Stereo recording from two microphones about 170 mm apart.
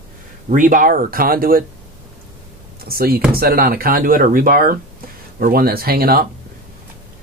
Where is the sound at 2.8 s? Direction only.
60° right (ahead or behind).